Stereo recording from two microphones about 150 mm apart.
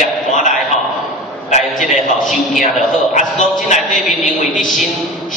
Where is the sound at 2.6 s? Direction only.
55° left (ahead or behind).